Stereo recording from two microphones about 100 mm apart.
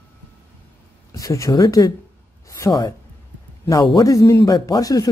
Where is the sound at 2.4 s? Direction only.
30° left (ahead or behind).